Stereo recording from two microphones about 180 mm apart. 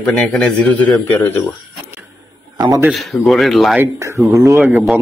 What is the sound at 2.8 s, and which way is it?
Speech, centre (ahead or behind).